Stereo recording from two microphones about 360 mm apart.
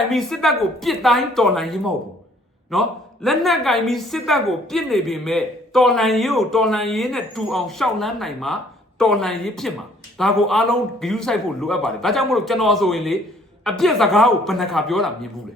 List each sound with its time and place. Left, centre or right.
0.1 s a woman's voice: centre